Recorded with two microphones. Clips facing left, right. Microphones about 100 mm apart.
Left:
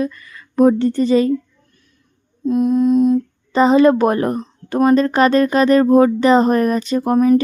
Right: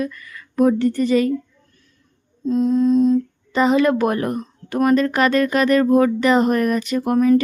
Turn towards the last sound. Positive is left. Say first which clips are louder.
# left 2 dB
turn(degrees=25)  # may be behind; listen again after turning